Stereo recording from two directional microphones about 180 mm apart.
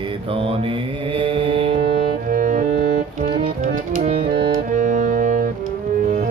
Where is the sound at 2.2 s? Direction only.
50° right (ahead or behind).